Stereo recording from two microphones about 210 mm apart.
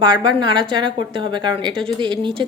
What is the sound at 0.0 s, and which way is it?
Speech, 20° right (ahead or behind).